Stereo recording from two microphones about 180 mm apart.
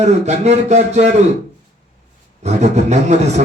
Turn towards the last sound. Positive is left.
turn(degrees=-40)  # may be behind; listen again after turning